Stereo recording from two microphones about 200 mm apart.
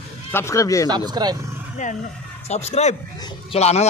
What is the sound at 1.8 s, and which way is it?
Speech, 40° left (ahead or behind).